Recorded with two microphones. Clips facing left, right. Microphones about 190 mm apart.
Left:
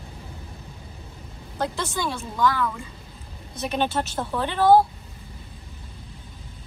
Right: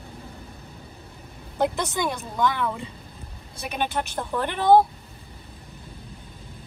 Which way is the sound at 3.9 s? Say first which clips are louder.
Left 1 dB; 15° right (ahead or behind).